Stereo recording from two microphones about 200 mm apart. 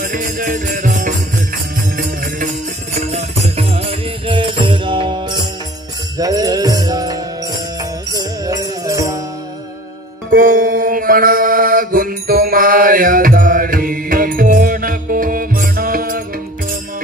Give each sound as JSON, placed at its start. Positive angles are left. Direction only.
{"t": 0.0, "sound": "music", "side_deg": -45}
{"t": 3.1, "sound": "music", "side_deg": -35}
{"t": 10.3, "sound": "mantra", "side_deg": -45}